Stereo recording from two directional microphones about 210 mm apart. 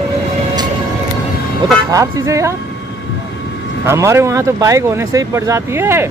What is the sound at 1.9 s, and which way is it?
Speech, 15° right (ahead or behind).